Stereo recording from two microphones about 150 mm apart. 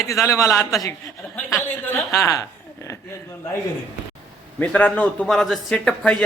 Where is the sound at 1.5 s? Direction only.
15° left (ahead or behind).